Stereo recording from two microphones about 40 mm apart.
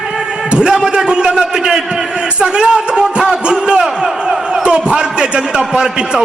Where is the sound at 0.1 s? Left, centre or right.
Right.